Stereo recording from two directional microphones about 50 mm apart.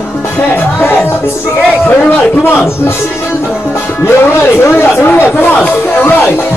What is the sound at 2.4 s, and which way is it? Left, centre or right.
Speech, left.